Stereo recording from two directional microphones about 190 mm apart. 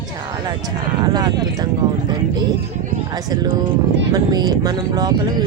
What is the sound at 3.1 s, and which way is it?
Speech, 20° right (ahead or behind).